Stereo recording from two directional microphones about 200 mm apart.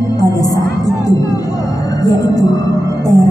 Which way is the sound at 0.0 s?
20° left (ahead or behind).